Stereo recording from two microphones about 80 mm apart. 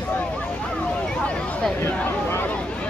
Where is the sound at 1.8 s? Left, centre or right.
Left.